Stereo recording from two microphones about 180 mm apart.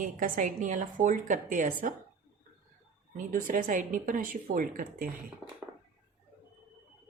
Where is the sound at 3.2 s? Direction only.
50° right (ahead or behind).